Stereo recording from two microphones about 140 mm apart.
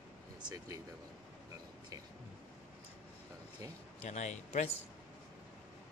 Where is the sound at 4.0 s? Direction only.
55° left (ahead or behind).